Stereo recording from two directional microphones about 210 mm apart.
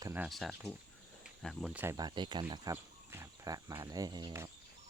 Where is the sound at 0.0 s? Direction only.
10° right (ahead or behind).